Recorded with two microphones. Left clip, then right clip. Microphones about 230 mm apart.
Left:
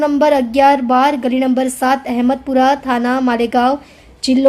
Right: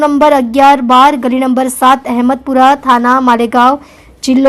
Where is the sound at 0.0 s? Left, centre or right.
Centre.